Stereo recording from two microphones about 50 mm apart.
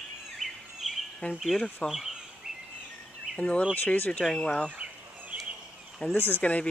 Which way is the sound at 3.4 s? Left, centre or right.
Left.